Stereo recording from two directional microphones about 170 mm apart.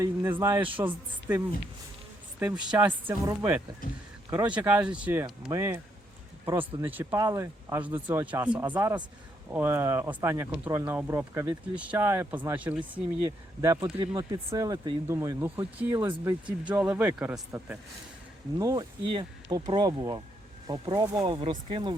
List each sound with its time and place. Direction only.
0.0 s speech: 15° right (ahead or behind)
2.6 s speech: 10° right (ahead or behind)
14.0 s speech: 25° right (ahead or behind)
16.0 s speech: 25° right (ahead or behind)
16.5 s speech: 5° right (ahead or behind)
18.6 s speech: 25° right (ahead or behind)